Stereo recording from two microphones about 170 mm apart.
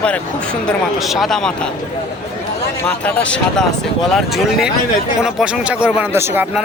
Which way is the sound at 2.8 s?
10° left (ahead or behind).